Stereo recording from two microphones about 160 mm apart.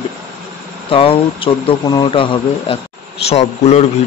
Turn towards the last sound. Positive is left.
turn(degrees=40)  # may be behind; listen again after turning